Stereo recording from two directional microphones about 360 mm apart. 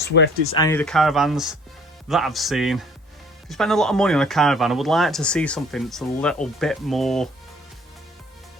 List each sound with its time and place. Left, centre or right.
0.0 s speech: left
0.5 s speech: centre